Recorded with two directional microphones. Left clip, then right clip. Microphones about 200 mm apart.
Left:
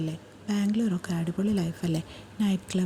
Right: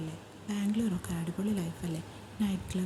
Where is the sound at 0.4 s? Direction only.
25° left (ahead or behind).